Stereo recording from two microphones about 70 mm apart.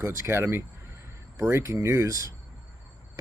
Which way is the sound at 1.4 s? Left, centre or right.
Right.